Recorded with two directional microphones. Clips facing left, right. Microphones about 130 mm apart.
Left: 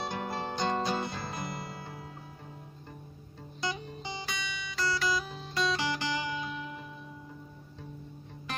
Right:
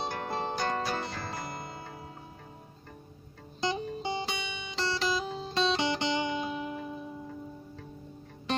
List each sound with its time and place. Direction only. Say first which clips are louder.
0.3 s music: right 2 dB; 30° right (ahead or behind)
0.6 s guitar: left 5 dB; 20° left (ahead or behind)
1.4 s music: even; 30° right (ahead or behind)
3.6 s music: right 5 dB; 25° right (ahead or behind)